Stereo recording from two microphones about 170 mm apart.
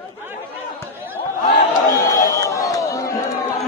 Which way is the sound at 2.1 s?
20° left (ahead or behind).